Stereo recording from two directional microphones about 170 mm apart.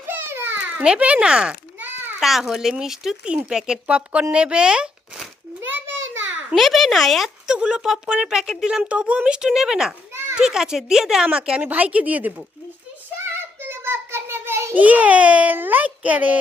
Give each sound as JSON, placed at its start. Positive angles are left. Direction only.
{"t": 0.0, "sound": "babbling", "side_deg": -15}
{"t": 2.2, "sound": "speech", "side_deg": 0}
{"t": 6.0, "sound": "a sound", "side_deg": -90}
{"t": 6.5, "sound": "speech", "side_deg": 0}
{"t": 10.1, "sound": "children playing", "side_deg": -15}
{"t": 10.4, "sound": "speech", "side_deg": -5}
{"t": 13.6, "sound": "a sound", "side_deg": -15}